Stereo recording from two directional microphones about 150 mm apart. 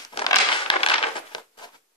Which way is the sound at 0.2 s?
45° left (ahead or behind).